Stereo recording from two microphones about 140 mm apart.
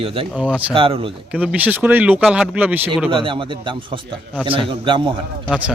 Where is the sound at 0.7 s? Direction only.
40° right (ahead or behind).